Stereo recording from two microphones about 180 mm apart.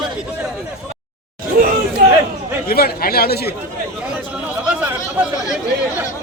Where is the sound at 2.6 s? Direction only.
55° left (ahead or behind).